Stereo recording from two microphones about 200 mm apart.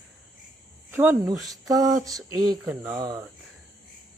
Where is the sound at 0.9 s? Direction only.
10° right (ahead or behind).